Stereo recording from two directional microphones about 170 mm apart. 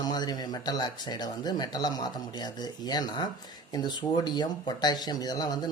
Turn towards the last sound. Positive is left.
turn(degrees=25)  # may be behind; listen again after turning